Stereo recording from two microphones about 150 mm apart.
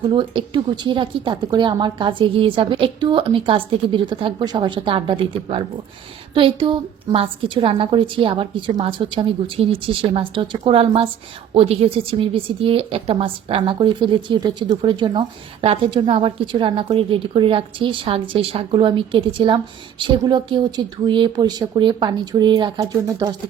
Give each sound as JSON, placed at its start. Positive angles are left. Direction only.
{"t": 0.1, "sound": "a woman's voice", "side_deg": -35}